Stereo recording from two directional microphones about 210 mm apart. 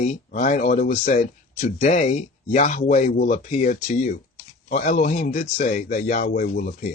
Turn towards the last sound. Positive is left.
turn(degrees=40)  # may be behind; listen again after turning